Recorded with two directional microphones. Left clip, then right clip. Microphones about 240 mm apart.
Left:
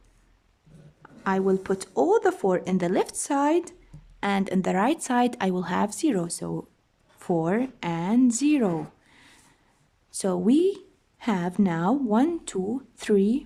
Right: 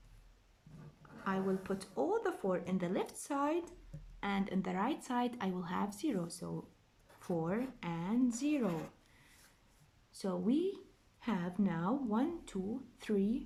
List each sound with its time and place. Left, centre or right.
1.2 s speech: left
10.1 s speech: left